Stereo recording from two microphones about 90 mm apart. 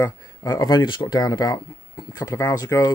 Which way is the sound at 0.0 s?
40° left (ahead or behind).